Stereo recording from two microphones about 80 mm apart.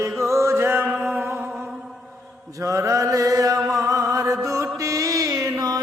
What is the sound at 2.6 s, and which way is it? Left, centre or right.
Chant, right.